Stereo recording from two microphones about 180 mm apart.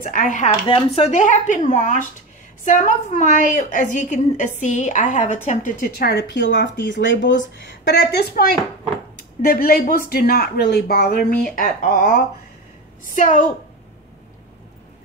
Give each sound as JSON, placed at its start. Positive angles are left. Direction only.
{"t": 0.0, "sound": "a woman's voice", "side_deg": 50}
{"t": 0.5, "sound": "a woman's voice", "side_deg": 30}
{"t": 9.5, "sound": "a woman's voice", "side_deg": 55}